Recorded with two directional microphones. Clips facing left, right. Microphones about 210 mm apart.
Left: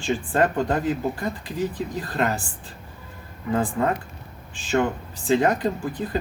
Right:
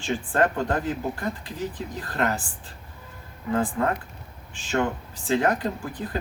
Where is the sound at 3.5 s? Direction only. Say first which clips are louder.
Left 1 dB; 20° left (ahead or behind).